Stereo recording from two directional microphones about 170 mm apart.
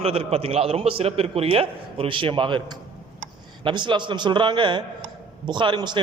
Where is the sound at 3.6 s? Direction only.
30° right (ahead or behind).